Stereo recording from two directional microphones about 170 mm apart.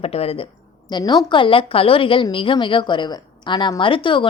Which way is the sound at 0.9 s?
25° left (ahead or behind).